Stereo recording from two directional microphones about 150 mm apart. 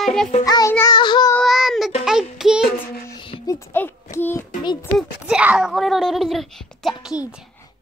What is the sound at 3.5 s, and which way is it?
Speech, 15° left (ahead or behind).